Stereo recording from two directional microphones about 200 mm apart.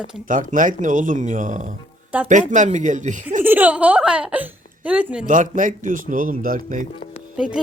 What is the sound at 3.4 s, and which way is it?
Speech, 10° right (ahead or behind).